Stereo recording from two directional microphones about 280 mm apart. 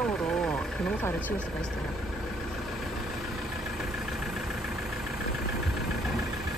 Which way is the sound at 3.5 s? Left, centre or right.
Centre.